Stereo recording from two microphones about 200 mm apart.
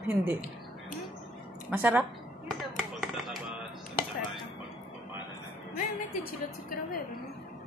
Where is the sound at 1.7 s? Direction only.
10° right (ahead or behind).